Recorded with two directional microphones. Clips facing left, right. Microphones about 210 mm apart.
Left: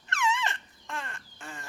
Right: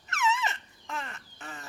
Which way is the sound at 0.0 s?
5° right (ahead or behind).